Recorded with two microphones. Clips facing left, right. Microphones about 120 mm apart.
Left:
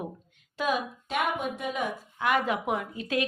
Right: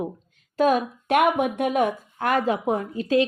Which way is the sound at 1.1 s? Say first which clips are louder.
Right 10 dB; 65° right (ahead or behind).